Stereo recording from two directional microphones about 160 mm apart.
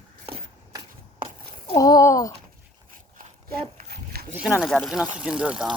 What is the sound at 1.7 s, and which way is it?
Speech, 20° left (ahead or behind).